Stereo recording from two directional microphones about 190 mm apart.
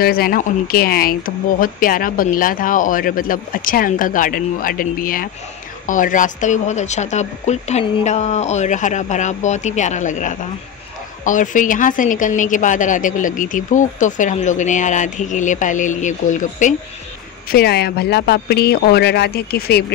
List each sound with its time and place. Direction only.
0.0 s a woman's voice: 50° left (ahead or behind)
17.5 s speech: 55° left (ahead or behind)